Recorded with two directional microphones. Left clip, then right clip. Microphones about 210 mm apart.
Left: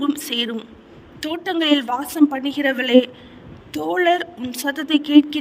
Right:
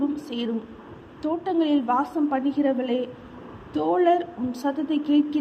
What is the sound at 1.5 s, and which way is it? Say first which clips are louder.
Speech: left 5 dB; 55° left (ahead or behind).